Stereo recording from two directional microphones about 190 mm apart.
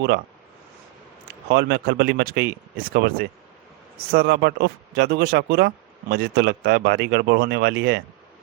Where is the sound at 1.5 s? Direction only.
60° right (ahead or behind).